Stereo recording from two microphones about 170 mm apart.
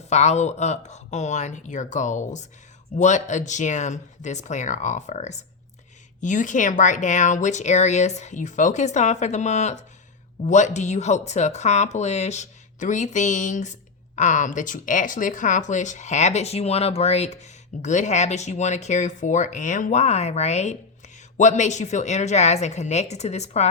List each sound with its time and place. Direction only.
0.1 s a woman's voice: 40° left (ahead or behind)